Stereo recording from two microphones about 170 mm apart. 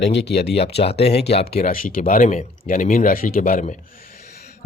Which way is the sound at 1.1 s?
75° left (ahead or behind).